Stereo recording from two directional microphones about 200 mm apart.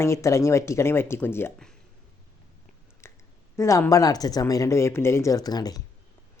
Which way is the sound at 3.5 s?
15° left (ahead or behind).